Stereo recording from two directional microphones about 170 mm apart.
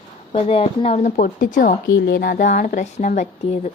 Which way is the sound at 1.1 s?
50° left (ahead or behind).